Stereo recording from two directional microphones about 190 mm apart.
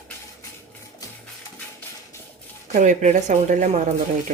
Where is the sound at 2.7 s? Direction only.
40° right (ahead or behind).